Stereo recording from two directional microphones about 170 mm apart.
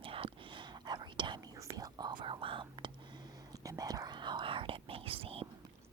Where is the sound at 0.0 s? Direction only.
30° right (ahead or behind).